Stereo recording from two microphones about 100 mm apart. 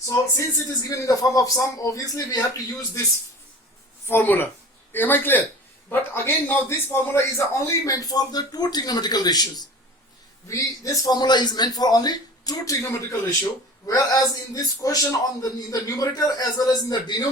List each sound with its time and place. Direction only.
0.0 s a man's voice: 30° left (ahead or behind)
4.0 s a man's voice: 20° left (ahead or behind); by 17.2 s 45° left (ahead or behind)